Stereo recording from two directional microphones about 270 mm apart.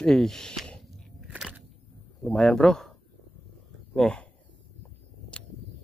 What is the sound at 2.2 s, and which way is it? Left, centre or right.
Speech, centre.